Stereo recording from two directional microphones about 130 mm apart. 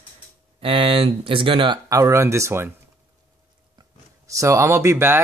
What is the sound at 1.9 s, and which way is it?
Speech, 25° right (ahead or behind).